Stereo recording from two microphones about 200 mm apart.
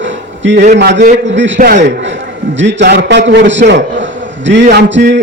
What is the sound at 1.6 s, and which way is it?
Speech, 45° right (ahead or behind).